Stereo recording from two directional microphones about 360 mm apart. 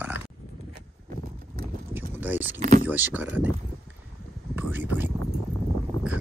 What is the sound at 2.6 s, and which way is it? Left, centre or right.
Speech, right.